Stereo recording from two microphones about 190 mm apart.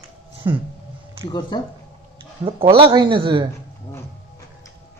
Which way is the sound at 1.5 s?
20° left (ahead or behind).